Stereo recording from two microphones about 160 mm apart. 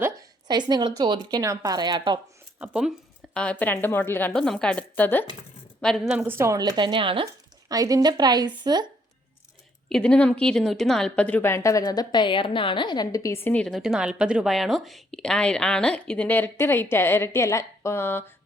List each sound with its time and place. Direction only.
0.0 s a woman's voice: 25° right (ahead or behind)
2.6 s speech: 5° right (ahead or behind)
3.3 s a woman's voice: 10° left (ahead or behind)
5.8 s a woman's voice: centre (ahead or behind); by 7.3 s 30° right (ahead or behind)
7.7 s a woman's voice: 20° right (ahead or behind)
9.9 s a woman's voice: 5° left (ahead or behind)